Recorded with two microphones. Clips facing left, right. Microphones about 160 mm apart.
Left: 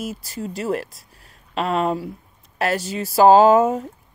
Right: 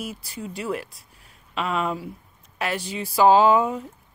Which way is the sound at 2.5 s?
40° left (ahead or behind).